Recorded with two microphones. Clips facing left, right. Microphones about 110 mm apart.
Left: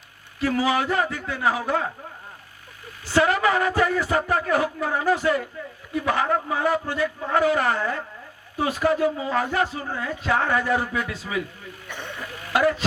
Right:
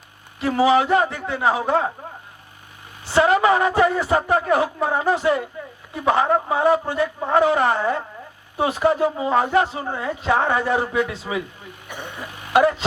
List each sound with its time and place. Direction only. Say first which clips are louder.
0.3 s speech: right 5 dB; 20° right (ahead or behind)
3.1 s speech: right 4 dB; 20° right (ahead or behind)